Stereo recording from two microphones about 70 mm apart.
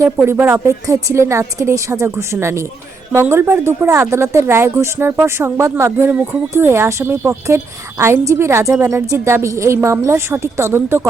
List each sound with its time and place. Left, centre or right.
0.0 s a woman's voice: right
0.7 s a woman's voice: right